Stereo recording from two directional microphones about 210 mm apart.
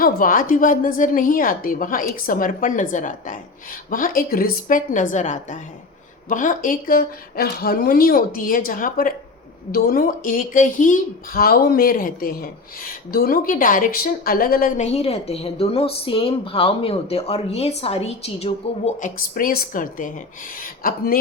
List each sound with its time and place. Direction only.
0.0 s speech: 40° left (ahead or behind)